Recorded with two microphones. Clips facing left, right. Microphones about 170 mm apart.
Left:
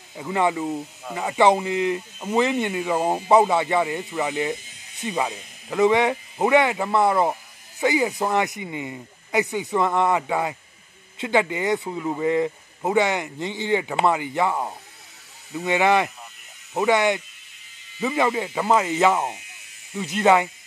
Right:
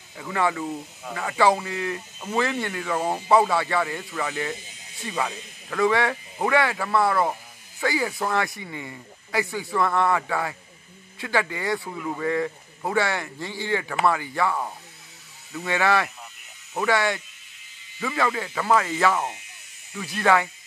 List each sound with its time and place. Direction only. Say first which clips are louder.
0.1 s speech: left 3 dB; 20° left (ahead or behind)